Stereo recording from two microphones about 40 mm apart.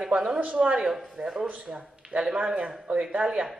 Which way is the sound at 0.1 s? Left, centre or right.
Right.